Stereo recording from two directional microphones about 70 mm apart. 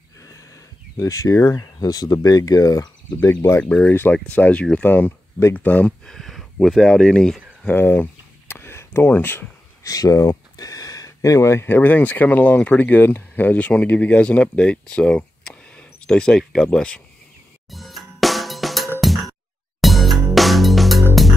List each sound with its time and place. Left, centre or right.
0.9 s speech: left
1.9 s speech: left
3.6 s speech: centre
6.0 s speech: centre
7.6 s speech: left
8.5 s a sound: left
9.0 s speech: left
9.8 s speech: left
10.5 s a sound: left
11.6 s speech: left
17.6 s music: centre